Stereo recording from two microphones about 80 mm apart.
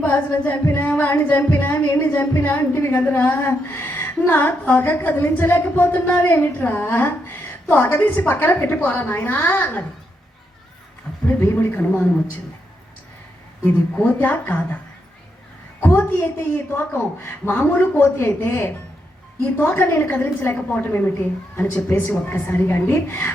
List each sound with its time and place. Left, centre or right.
0.0 s singing: left
0.8 s a woman's voice: left
11.3 s a woman's voice: left
13.9 s a woman's voice: left
15.8 s a woman's voice: left